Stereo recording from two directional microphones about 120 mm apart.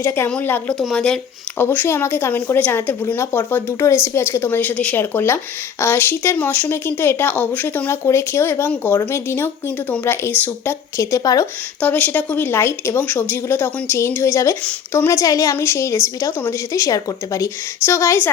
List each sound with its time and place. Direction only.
0.0 s speech: 20° left (ahead or behind); by 1.2 s 5° left (ahead or behind)
1.5 s speech: 15° left (ahead or behind)
11.8 s speech: 15° left (ahead or behind)